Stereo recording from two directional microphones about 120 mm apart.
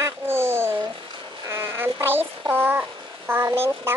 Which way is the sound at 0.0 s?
20° right (ahead or behind).